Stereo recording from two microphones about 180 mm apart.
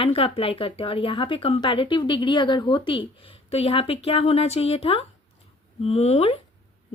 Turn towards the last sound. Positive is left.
turn(degrees=35)  # may be behind; listen again after turning